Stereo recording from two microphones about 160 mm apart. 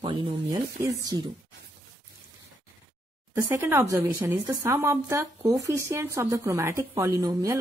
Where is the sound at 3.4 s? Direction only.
15° right (ahead or behind).